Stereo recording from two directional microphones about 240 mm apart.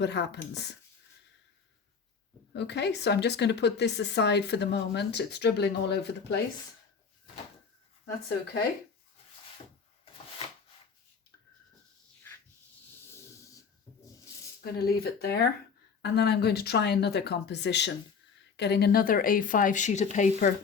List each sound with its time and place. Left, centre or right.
0.0 s speech: left
2.5 s speech: left
14.6 s speech: left